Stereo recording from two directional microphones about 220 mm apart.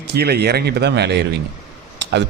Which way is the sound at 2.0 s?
50° right (ahead or behind).